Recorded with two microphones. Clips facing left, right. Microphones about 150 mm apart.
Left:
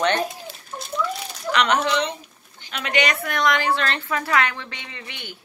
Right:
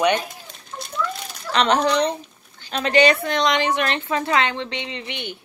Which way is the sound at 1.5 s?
30° right (ahead or behind).